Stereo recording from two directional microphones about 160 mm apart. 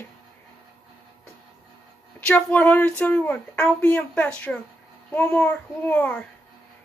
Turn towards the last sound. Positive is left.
turn(degrees=10)  # may be behind; listen again after turning